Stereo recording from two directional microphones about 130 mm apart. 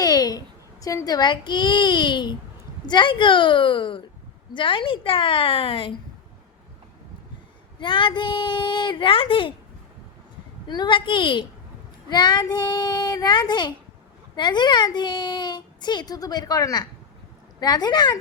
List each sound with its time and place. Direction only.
0.0 s a child's voice: 30° left (ahead or behind)
7.8 s speech: 40° left (ahead or behind)
10.7 s speech: 35° left (ahead or behind)